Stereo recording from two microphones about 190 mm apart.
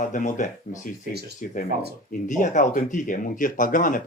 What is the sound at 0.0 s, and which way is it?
Speech, 45° left (ahead or behind).